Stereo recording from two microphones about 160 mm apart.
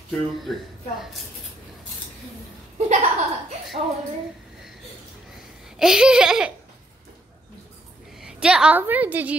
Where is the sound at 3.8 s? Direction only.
40° right (ahead or behind).